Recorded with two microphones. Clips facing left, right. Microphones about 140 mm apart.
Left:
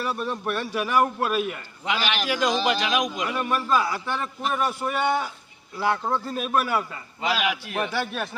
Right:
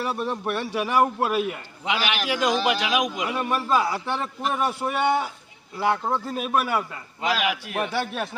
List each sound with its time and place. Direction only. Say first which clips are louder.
0.0 s a man's voice: right 1 dB; 20° right (ahead or behind)
2.0 s a man's voice: even; 5° right (ahead or behind)
3.4 s a man's voice: right 1 dB; 25° right (ahead or behind); by 7.9 s 5° right (ahead or behind)
7.9 s a man's voice: right 1 dB; 15° right (ahead or behind)